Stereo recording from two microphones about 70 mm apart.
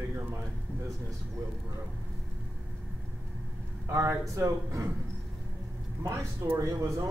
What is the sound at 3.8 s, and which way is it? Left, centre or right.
Speech, right.